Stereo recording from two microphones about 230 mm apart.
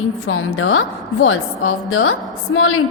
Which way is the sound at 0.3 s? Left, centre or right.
Left.